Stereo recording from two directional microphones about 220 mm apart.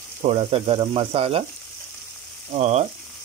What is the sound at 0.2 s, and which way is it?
Stir, 25° right (ahead or behind).